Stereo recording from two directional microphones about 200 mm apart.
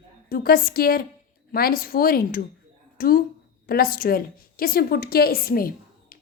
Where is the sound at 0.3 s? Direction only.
50° left (ahead or behind).